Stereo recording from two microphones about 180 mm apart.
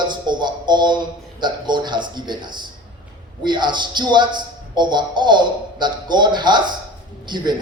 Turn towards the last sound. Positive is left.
turn(degrees=-25)  # may be behind; listen again after turning